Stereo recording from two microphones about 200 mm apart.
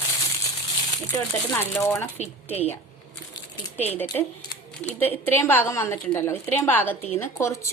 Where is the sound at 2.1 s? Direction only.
30° left (ahead or behind).